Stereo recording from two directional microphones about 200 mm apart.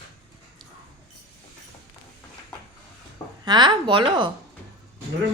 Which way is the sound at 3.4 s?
20° right (ahead or behind).